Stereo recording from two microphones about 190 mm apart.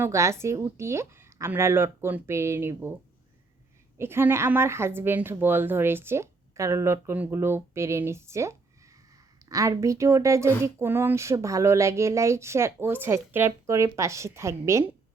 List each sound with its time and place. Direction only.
0.0 s a woman's voice: 15° right (ahead or behind)
3.9 s a woman's voice: 15° right (ahead or behind)